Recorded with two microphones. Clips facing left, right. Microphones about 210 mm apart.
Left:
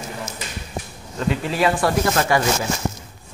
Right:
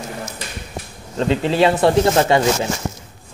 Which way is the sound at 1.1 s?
25° right (ahead or behind).